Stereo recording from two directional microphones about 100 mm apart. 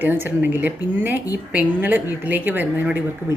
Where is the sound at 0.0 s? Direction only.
20° right (ahead or behind).